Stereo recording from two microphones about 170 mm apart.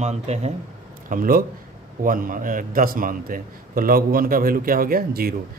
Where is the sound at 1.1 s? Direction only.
55° right (ahead or behind).